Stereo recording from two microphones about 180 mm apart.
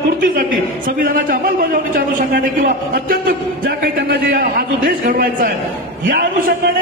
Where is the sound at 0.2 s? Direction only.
50° right (ahead or behind).